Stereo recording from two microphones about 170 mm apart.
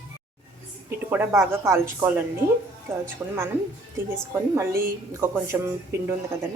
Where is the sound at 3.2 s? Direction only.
5° right (ahead or behind).